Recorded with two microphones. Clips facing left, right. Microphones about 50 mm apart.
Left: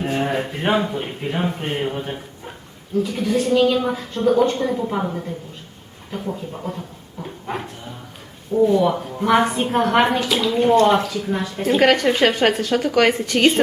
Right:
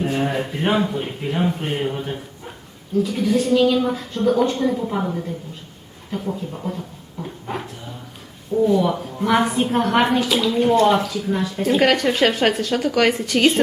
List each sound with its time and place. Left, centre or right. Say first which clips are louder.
0.0 s a man's voice: even; centre